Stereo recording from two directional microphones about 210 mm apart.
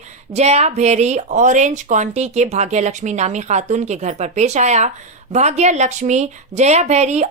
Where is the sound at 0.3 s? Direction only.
30° right (ahead or behind).